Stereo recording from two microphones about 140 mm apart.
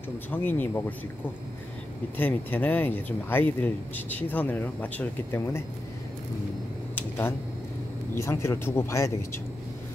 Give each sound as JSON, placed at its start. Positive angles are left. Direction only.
{"t": 0.3, "sound": "speech", "side_deg": 15}
{"t": 2.1, "sound": "speech", "side_deg": 15}
{"t": 7.0, "sound": "a sound", "side_deg": 15}
{"t": 8.1, "sound": "speech", "side_deg": 20}